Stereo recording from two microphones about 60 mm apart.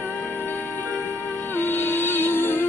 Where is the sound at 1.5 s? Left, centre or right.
Left.